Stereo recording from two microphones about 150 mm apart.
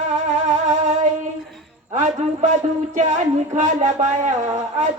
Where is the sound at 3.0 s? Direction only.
55° right (ahead or behind).